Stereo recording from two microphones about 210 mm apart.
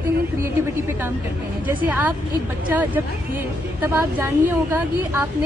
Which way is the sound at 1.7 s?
10° right (ahead or behind).